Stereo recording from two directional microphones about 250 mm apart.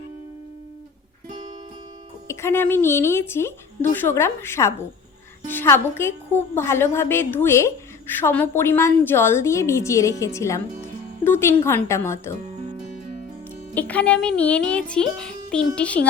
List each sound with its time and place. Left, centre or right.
2.2 s a woman's voice: centre
13.7 s speech: centre